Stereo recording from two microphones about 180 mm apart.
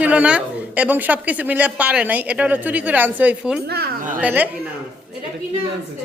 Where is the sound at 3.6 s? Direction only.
60° right (ahead or behind).